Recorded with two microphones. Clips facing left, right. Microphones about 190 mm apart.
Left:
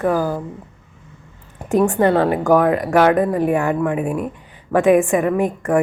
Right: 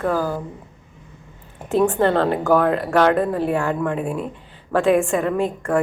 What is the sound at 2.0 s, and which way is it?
Speech, 10° left (ahead or behind).